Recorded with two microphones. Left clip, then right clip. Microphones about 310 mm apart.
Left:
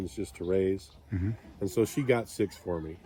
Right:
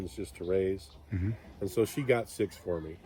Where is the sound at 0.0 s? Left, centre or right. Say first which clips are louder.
Left 3 dB; left.